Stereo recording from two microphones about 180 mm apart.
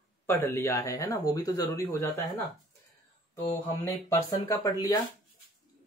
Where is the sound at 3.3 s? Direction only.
15° left (ahead or behind).